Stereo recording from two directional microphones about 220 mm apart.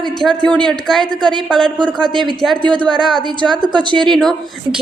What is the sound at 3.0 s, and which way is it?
Speech, centre (ahead or behind).